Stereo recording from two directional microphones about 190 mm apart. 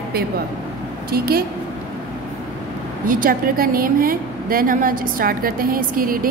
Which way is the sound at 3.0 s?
45° right (ahead or behind).